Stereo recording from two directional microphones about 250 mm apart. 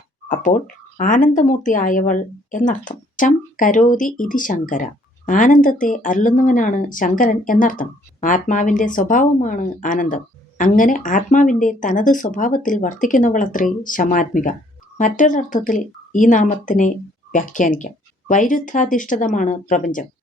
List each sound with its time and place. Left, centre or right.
0.9 s speech: left